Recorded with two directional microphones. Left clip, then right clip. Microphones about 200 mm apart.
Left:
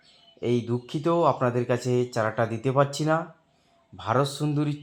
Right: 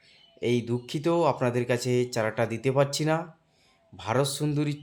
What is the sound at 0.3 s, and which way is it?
Speech, 5° right (ahead or behind).